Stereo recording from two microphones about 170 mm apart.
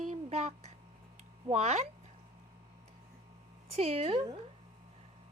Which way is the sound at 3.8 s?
35° right (ahead or behind).